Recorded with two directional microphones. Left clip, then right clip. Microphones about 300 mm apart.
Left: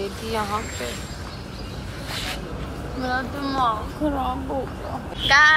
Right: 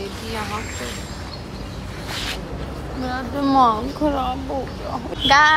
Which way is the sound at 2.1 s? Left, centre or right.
Centre.